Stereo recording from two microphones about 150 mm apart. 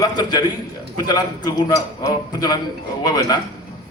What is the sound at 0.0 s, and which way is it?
A man's voice, 25° left (ahead or behind).